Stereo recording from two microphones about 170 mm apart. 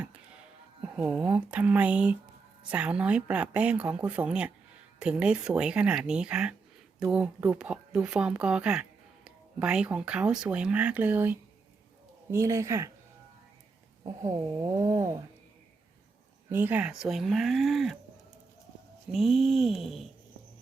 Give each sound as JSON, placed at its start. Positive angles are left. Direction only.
{"t": 0.9, "sound": "speech", "side_deg": -5}
{"t": 14.0, "sound": "speech", "side_deg": -20}
{"t": 16.5, "sound": "speech", "side_deg": -10}
{"t": 19.1, "sound": "speech", "side_deg": 0}